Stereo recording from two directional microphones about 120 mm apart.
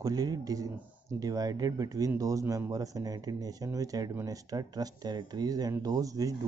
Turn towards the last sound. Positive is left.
turn(degrees=-30)  # may be behind; listen again after turning